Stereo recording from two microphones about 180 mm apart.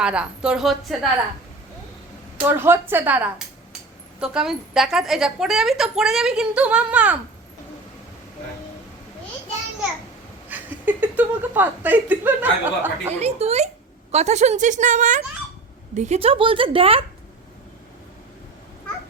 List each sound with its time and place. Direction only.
0.0 s a woman's voice: 5° right (ahead or behind)
2.4 s a woman's voice: 10° right (ahead or behind)
10.5 s speech: 10° right (ahead or behind)
13.1 s a woman's voice: 35° right (ahead or behind)